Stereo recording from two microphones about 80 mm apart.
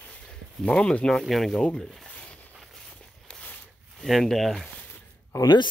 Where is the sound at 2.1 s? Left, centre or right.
Centre.